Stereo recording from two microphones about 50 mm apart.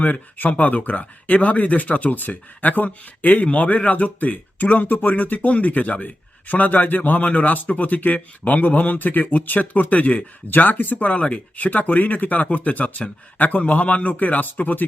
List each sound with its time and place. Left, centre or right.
0.0 s speech: left
11.1 s speech: left